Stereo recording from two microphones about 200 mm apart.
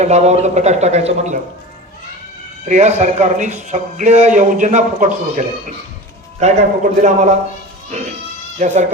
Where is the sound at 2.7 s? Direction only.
35° right (ahead or behind).